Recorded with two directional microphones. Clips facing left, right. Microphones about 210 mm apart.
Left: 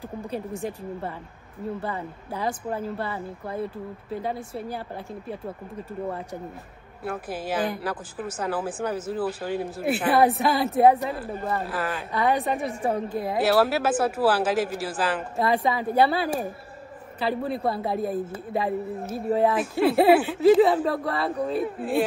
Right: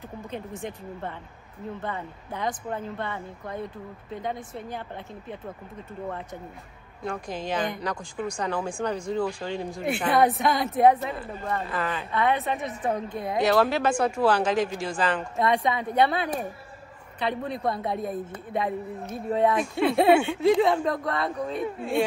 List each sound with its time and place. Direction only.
0.5 s speech: 10° left (ahead or behind)
7.1 s speech: 5° left (ahead or behind)
12.1 s a woman's voice: 30° left (ahead or behind)
12.9 s speech: 5° left (ahead or behind)